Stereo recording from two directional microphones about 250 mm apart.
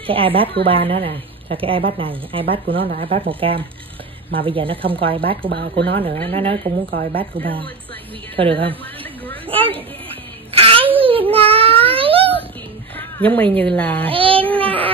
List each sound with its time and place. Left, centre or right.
0.0 s a woman's voice: right
5.5 s speech: right
6.3 s a woman's voice: right
8.4 s a woman's voice: right
9.5 s a sound: right
11.0 s babbling: right
12.9 s speech: centre
14.1 s child singing: right
14.6 s a sound: right